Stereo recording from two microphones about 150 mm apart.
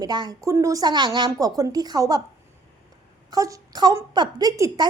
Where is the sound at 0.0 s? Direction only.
25° right (ahead or behind).